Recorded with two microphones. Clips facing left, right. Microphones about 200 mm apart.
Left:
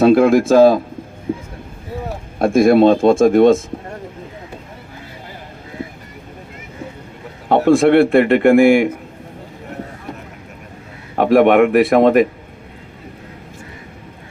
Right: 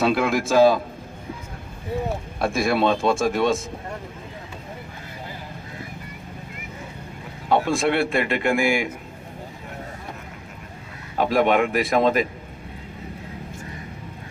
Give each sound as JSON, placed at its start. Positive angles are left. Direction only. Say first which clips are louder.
{"t": 0.0, "sound": "speech", "louder": "left 10 dB", "side_deg": 50}
{"t": 2.4, "sound": "speech", "louder": "left 11 dB", "side_deg": 50}
{"t": 7.4, "sound": "a man's voice", "louder": "left 9 dB", "side_deg": 55}
{"t": 11.2, "sound": "a man's voice", "louder": "left 8 dB", "side_deg": 60}